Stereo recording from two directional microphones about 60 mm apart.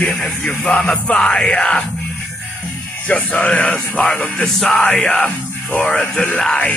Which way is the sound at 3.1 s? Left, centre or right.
Left.